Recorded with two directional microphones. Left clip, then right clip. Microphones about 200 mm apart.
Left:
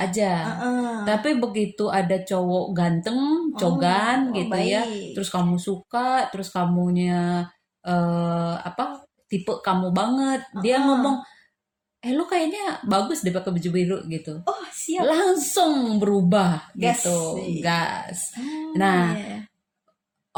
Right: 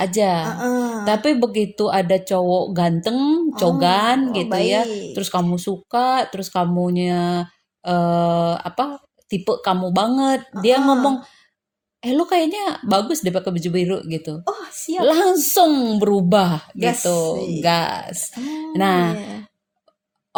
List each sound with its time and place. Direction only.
0.0 s a woman's voice: 35° right (ahead or behind)